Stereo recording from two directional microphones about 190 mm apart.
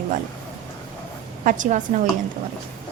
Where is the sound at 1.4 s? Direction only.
40° right (ahead or behind).